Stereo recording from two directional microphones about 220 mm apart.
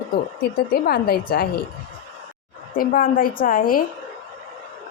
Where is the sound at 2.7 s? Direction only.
40° left (ahead or behind).